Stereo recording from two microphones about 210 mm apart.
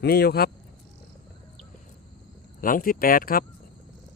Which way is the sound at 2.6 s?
40° left (ahead or behind).